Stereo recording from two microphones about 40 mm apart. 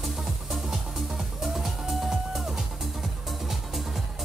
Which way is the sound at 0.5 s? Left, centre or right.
Centre.